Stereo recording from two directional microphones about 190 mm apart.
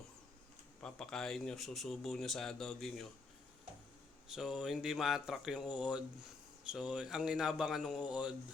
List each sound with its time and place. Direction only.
0.8 s speech: 5° left (ahead or behind)
4.3 s speech: centre (ahead or behind)